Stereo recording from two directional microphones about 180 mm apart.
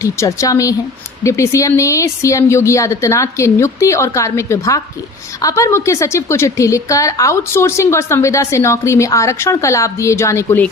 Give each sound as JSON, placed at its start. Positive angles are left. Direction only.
{"t": 0.0, "sound": "a woman's voice", "side_deg": 15}